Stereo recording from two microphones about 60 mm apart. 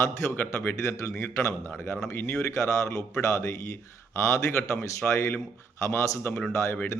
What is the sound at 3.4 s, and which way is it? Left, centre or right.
Speech, left.